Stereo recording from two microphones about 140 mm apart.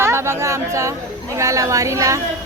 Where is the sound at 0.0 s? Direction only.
20° right (ahead or behind).